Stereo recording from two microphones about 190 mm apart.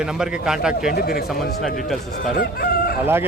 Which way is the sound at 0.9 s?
55° left (ahead or behind).